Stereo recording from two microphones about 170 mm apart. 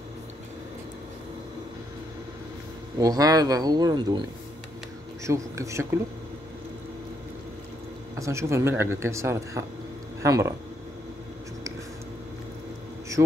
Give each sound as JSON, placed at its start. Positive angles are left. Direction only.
{"t": 3.0, "sound": "speech", "side_deg": -20}
{"t": 5.2, "sound": "speech", "side_deg": -15}
{"t": 8.2, "sound": "speech", "side_deg": -15}